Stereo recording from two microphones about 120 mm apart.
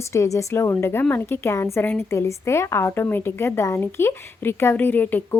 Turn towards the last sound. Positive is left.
turn(degrees=15)  # may be behind; listen again after turning